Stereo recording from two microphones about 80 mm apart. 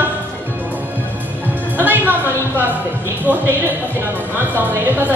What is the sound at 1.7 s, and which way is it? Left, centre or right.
Music, right.